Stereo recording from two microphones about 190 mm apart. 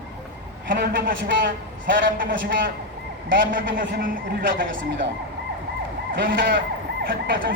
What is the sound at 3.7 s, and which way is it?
Speech, 45° right (ahead or behind).